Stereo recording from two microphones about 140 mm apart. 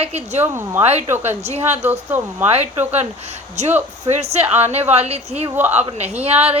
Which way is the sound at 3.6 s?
55° right (ahead or behind).